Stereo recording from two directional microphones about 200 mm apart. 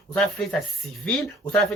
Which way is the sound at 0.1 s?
5° left (ahead or behind).